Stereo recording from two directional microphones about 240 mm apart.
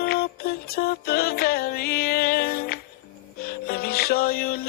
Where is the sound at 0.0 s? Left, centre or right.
Left.